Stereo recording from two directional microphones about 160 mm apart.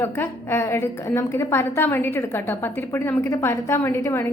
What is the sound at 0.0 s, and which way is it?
A woman's voice, 15° left (ahead or behind).